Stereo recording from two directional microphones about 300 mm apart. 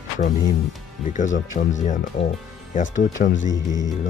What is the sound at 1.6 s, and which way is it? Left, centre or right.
Speech, left.